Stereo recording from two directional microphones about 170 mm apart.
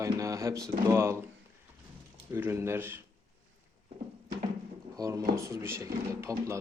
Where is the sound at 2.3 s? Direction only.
15° right (ahead or behind).